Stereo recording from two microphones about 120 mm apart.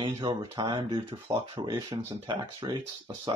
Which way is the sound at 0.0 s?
40° right (ahead or behind).